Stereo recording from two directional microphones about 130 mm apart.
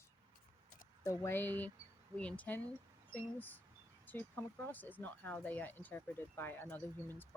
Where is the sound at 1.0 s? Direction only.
20° left (ahead or behind).